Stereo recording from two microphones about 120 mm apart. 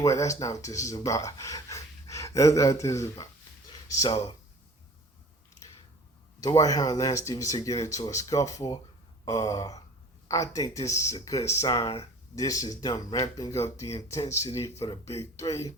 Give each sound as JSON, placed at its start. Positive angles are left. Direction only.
{"t": 0.0, "sound": "speech", "side_deg": 25}
{"t": 6.4, "sound": "speech", "side_deg": 30}